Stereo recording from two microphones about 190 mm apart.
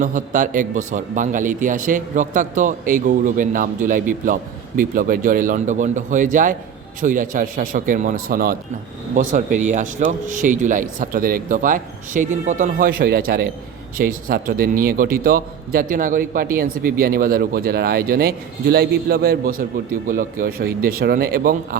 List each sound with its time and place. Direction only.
0.0 s speech: 40° right (ahead or behind)